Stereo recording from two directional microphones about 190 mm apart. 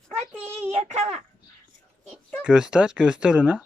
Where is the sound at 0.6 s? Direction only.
35° right (ahead or behind).